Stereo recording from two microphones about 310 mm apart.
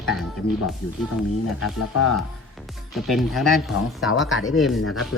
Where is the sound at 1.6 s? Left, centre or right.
Left.